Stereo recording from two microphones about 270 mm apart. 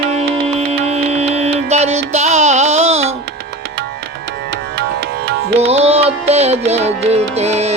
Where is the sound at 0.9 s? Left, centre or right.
Right.